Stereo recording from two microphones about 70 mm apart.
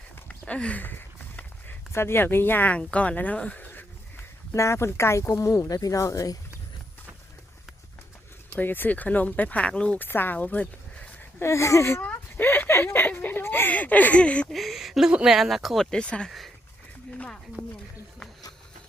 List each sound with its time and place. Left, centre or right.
0.3 s a sound: centre
1.9 s speech: left
4.5 s speech: left
8.5 s speech: left
10.0 s speech: left
11.3 s speech: left; by 14.4 s centre
14.5 s speech: centre
15.9 s speech: centre
17.6 s speech: right